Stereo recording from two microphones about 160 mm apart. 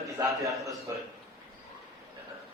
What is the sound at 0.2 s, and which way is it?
Speech, 20° right (ahead or behind).